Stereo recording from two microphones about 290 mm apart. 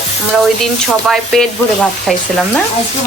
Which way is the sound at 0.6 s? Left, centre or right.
Centre.